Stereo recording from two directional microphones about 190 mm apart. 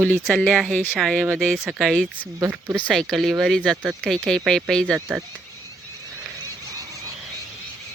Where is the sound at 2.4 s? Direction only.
10° right (ahead or behind).